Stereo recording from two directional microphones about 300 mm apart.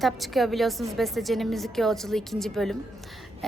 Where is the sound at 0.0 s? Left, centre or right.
Centre.